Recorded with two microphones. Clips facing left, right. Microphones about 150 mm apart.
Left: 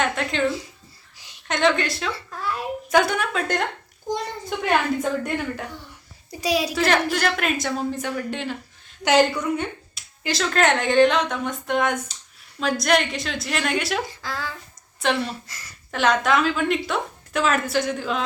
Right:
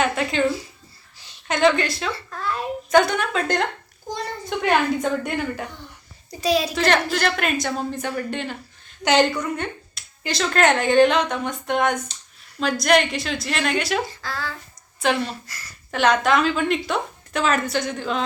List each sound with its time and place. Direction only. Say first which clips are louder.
0.0 s a woman's voice: right 2 dB; 5° right (ahead or behind)
2.1 s a woman's voice: right 1 dB; 10° left (ahead or behind)
6.4 s a woman's voice: right 2 dB; 10° left (ahead or behind)
14.1 s speech: even; 15° left (ahead or behind)
15.0 s a woman's voice: right 1 dB; centre (ahead or behind)